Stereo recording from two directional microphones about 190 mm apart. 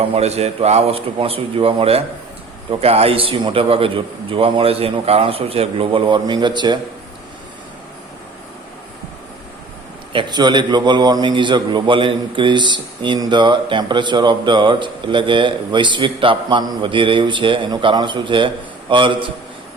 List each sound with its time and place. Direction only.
0.0 s a man's voice: 35° right (ahead or behind)
10.1 s a man's voice: 25° right (ahead or behind)